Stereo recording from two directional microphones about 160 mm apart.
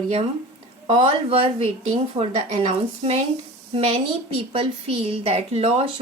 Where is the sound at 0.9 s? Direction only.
40° right (ahead or behind).